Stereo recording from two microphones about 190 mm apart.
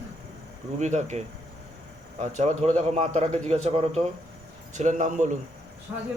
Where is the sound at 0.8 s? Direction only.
40° right (ahead or behind).